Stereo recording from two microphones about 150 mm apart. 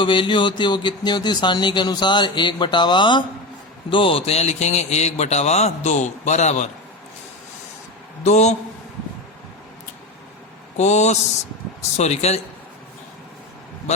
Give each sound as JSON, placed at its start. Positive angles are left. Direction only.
{"t": 0.0, "sound": "a man's voice", "side_deg": 35}
{"t": 8.2, "sound": "a man's voice", "side_deg": 50}
{"t": 10.8, "sound": "a man's voice", "side_deg": 50}